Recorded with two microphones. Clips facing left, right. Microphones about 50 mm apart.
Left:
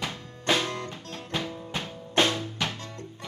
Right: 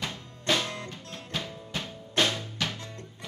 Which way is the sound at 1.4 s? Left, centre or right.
Left.